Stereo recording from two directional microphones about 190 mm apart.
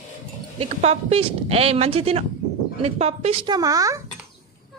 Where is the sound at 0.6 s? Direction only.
35° right (ahead or behind); by 4.0 s 15° right (ahead or behind).